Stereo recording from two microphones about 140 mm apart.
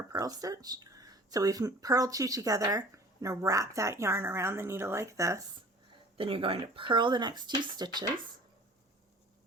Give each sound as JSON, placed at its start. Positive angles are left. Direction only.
{"t": 0.1, "sound": "speech", "side_deg": -25}
{"t": 6.1, "sound": "speech", "side_deg": -40}